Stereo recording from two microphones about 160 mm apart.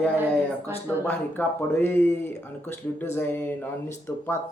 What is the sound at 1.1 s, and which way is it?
Speech, 10° left (ahead or behind).